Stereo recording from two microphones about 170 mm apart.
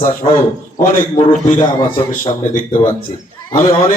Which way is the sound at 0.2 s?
35° left (ahead or behind).